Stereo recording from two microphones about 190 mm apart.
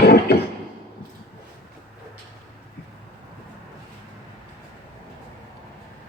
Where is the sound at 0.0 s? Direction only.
60° left (ahead or behind).